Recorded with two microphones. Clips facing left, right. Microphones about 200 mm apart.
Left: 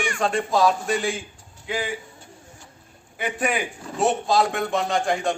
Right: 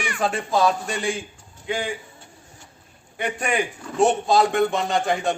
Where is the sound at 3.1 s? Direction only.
5° left (ahead or behind).